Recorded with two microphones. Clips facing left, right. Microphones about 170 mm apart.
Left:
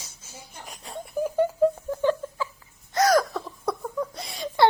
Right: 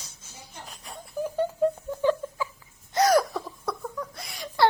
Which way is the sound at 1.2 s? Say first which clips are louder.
Left 3 dB; 15° left (ahead or behind).